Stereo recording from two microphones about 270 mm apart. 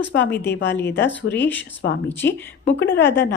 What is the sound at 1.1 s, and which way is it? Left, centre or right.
Speech, left.